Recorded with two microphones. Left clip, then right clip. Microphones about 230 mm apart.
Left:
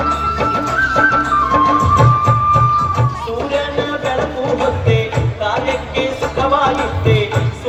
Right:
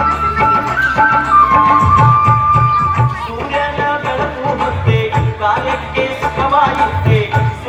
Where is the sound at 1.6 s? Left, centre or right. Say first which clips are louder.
Right 3 dB; left.